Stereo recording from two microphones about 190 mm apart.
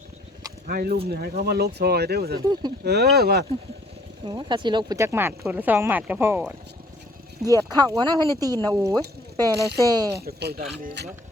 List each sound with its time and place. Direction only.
0.7 s speech: 50° right (ahead or behind)
2.4 s speech: 20° right (ahead or behind)
2.8 s speech: 60° right (ahead or behind)
4.3 s speech: 25° right (ahead or behind)
10.2 s speech: 55° right (ahead or behind)